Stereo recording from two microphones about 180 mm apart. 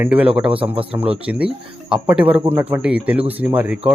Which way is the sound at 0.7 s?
30° right (ahead or behind).